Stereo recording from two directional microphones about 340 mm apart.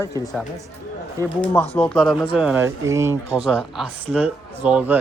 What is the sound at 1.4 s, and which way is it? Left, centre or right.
A man's voice, centre.